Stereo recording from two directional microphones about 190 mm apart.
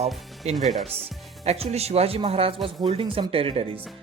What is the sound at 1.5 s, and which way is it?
Speech, 35° right (ahead or behind).